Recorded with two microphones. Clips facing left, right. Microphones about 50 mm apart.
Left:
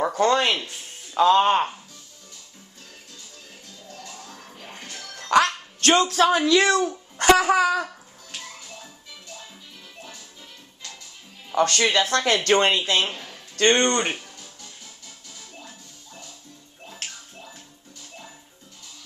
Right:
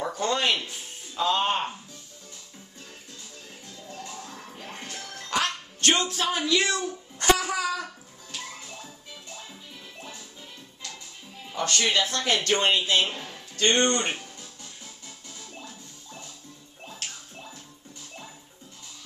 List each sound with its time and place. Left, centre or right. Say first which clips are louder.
0.0 s a sound: left 7 dB; left
1.1 s speech: left 8 dB; left
4.0 s music: right 2 dB; right
5.9 s speech: left 7 dB; left
6.9 s a sound: left 5 dB; left
11.5 s speech: left 5 dB; left
13.1 s a sound: even; centre
13.6 s speech: left 4 dB; left
15.0 s music: right 1 dB; right